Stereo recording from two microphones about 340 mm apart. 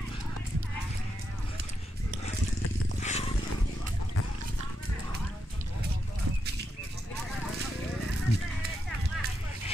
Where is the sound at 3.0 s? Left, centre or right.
Centre.